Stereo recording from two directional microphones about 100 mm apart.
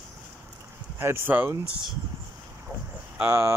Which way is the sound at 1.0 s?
20° right (ahead or behind).